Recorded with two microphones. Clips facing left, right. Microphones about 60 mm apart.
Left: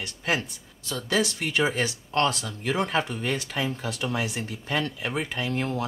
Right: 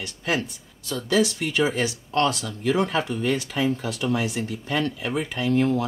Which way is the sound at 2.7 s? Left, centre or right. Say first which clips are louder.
Right 3 dB; centre.